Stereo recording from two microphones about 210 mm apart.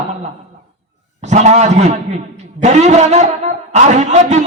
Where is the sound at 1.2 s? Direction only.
35° right (ahead or behind).